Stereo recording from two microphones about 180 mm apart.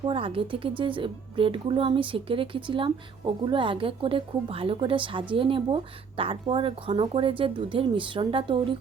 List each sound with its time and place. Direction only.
0.0 s speech: 30° right (ahead or behind)